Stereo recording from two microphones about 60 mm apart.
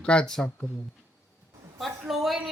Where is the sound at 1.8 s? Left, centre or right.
Centre.